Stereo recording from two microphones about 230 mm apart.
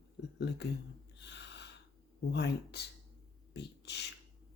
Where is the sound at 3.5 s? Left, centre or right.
Left.